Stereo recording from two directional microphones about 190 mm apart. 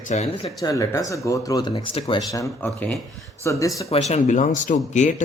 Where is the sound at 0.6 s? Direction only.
20° left (ahead or behind).